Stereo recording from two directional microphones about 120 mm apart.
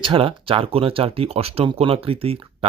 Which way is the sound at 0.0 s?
45° right (ahead or behind).